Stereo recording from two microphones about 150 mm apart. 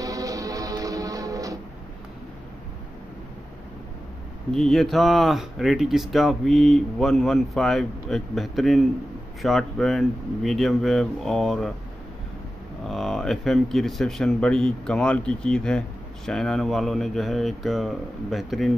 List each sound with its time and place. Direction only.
0.0 s music: 25° right (ahead or behind)
4.5 s speech: centre (ahead or behind)
12.8 s speech: centre (ahead or behind)